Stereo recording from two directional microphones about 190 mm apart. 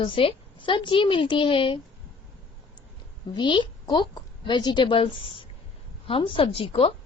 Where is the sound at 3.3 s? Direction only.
25° left (ahead or behind).